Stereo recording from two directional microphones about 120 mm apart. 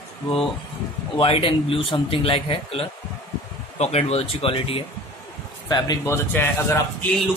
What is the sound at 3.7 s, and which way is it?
A man's voice, 65° left (ahead or behind).